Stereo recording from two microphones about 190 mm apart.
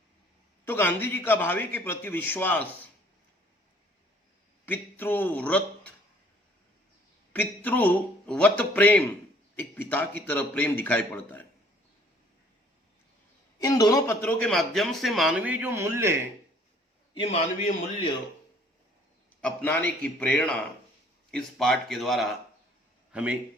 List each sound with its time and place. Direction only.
0.6 s a man's voice: 10° left (ahead or behind)
4.6 s a man's voice: 10° left (ahead or behind)
7.3 s a man's voice: 10° left (ahead or behind)
13.6 s a man's voice: 20° left (ahead or behind); by 16.2 s 15° right (ahead or behind)
17.2 s a man's voice: 35° left (ahead or behind)
19.4 s a man's voice: 10° left (ahead or behind)